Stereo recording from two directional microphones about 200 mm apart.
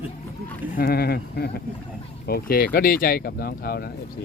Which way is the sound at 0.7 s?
50° left (ahead or behind).